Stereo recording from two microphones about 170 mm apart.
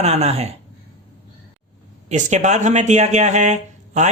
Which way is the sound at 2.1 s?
45° right (ahead or behind).